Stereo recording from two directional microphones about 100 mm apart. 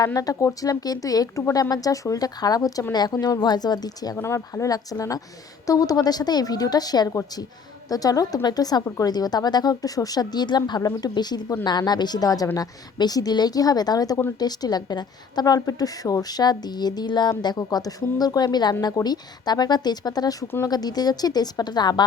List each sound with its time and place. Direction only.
0.0 s a woman's voice: 35° left (ahead or behind)
4.2 s a woman's voice: 30° left (ahead or behind); by 22.0 s 45° left (ahead or behind)